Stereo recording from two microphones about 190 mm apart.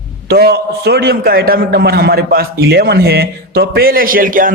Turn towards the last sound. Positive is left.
turn(degrees=-45)  # may be behind; listen again after turning